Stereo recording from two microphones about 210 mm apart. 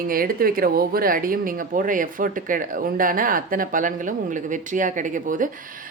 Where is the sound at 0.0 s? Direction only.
45° right (ahead or behind).